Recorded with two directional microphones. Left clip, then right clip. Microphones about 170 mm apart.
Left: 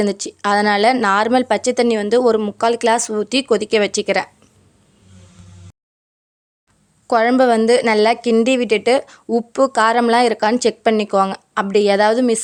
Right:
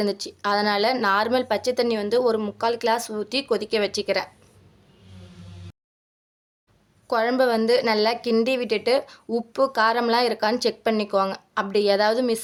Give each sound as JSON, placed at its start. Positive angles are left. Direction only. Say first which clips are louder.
{"t": 0.0, "sound": "a woman's voice", "louder": "left 6 dB", "side_deg": 40}
{"t": 7.1, "sound": "a woman's voice", "louder": "left 7 dB", "side_deg": 40}